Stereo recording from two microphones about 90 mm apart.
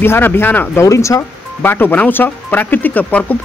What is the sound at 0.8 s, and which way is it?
Speech, 35° left (ahead or behind).